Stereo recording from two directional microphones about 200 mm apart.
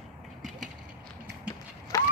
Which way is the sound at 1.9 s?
15° left (ahead or behind).